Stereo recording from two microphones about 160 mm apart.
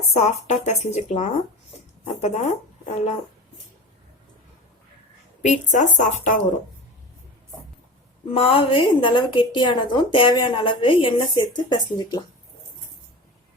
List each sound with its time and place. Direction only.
0.1 s speech: 45° left (ahead or behind)
5.4 s speech: 50° left (ahead or behind)
8.3 s a woman's voice: 35° left (ahead or behind)